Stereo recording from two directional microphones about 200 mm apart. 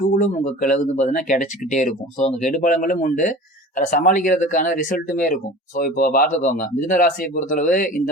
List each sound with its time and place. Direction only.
0.1 s speech: 40° left (ahead or behind)